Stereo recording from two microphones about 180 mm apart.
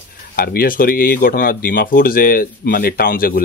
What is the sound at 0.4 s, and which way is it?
Speech, 55° left (ahead or behind).